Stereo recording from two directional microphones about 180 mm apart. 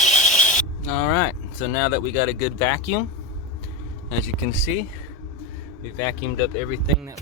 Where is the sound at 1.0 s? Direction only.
10° left (ahead or behind).